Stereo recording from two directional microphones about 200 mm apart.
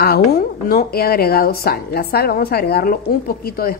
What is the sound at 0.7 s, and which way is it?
A woman's voice, 50° left (ahead or behind).